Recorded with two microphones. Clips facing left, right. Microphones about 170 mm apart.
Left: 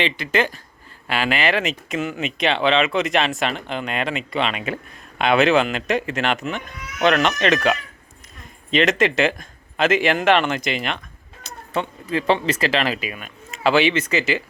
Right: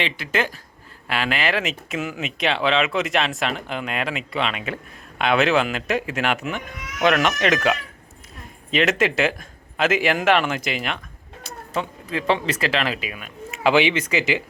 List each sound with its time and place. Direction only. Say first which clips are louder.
0.0 s speech: left 3 dB; centre (ahead or behind)
13.6 s speech: left 1 dB; 15° right (ahead or behind)